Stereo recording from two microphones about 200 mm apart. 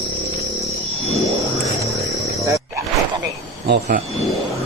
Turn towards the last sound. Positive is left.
turn(degrees=-45)  # may be behind; listen again after turning